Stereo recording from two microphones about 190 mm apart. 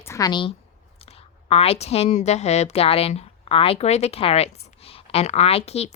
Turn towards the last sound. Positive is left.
turn(degrees=35)  # may be behind; listen again after turning